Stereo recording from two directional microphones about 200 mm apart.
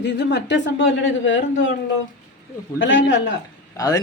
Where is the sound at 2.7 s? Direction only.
65° left (ahead or behind).